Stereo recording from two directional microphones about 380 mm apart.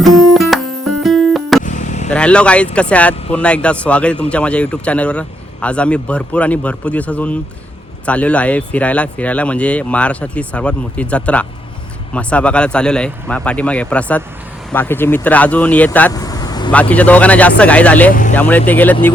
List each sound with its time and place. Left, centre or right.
0.0 s music: centre
1.6 s vehicle: centre
2.0 s a man's voice: centre
18.1 s speech: centre
18.3 s a man's voice: centre